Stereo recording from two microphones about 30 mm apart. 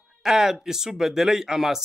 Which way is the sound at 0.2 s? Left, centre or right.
Centre.